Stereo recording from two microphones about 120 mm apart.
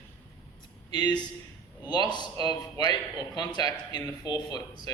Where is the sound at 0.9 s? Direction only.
35° left (ahead or behind).